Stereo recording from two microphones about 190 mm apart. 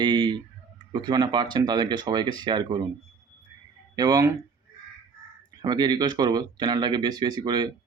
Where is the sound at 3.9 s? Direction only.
20° right (ahead or behind).